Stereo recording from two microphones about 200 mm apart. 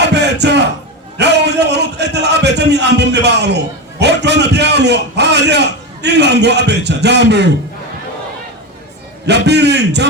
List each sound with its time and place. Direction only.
0.0 s a sound: 60° right (ahead or behind)
1.2 s a man's voice: 60° right (ahead or behind)
9.2 s a man's voice: 60° right (ahead or behind)